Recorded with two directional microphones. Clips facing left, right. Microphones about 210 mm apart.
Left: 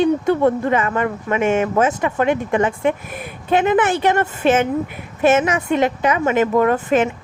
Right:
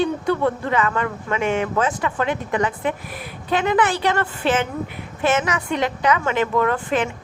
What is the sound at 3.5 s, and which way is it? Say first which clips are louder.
Speech: left 4 dB; 20° left (ahead or behind).